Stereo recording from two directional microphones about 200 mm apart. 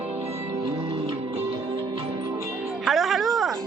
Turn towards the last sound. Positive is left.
turn(degrees=0)  # may be behind; listen again after turning